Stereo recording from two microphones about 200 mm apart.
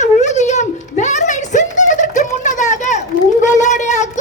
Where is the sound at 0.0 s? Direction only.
35° left (ahead or behind).